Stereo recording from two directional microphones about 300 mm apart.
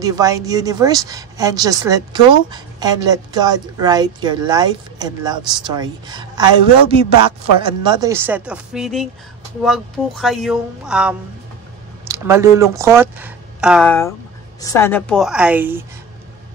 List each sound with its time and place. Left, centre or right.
0.0 s speech: centre
7.1 s a man's voice: left
7.6 s speech: centre